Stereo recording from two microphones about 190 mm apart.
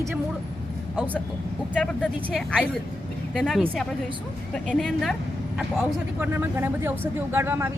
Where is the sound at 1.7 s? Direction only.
5° left (ahead or behind).